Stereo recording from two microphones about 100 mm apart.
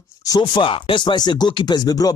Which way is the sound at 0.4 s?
55° left (ahead or behind).